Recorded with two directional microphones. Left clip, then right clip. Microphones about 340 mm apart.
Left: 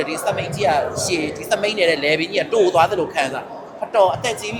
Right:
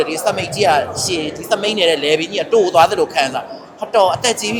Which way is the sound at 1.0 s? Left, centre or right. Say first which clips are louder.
Right 2 dB; centre.